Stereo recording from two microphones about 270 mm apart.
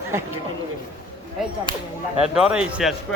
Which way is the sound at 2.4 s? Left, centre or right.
Centre.